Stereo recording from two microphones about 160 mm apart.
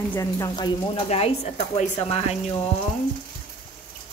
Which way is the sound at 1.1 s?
40° left (ahead or behind).